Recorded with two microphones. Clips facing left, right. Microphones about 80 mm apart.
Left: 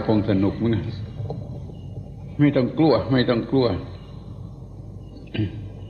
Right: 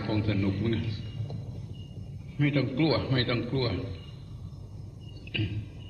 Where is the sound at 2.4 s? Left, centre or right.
Left.